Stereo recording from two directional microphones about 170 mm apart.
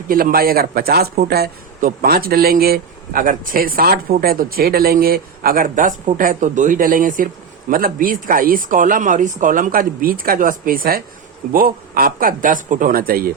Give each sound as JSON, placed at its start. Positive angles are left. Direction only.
{"t": 0.1, "sound": "speech", "side_deg": -55}